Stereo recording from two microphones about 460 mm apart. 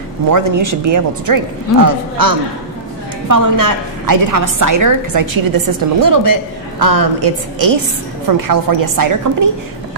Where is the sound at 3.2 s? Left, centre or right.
Right.